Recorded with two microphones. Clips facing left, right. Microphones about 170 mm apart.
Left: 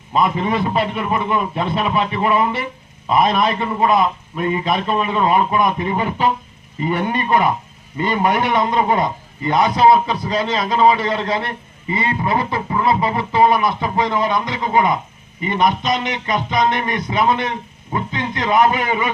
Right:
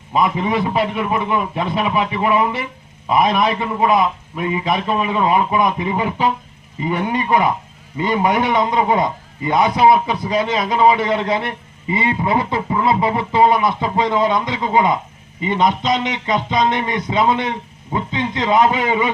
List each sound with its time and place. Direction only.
0.1 s a man's voice: 15° right (ahead or behind)